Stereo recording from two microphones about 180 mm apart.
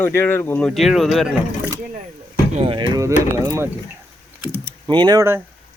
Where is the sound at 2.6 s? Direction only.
30° right (ahead or behind).